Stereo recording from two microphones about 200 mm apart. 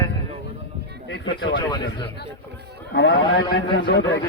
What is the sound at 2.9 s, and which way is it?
Speech, 65° left (ahead or behind).